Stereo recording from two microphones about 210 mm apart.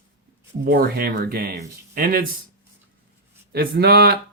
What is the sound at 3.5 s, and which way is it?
Speech, 50° right (ahead or behind).